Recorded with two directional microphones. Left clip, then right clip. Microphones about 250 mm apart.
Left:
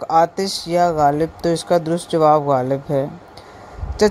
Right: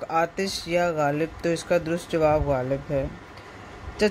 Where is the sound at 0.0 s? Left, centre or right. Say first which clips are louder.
Left 9 dB; centre.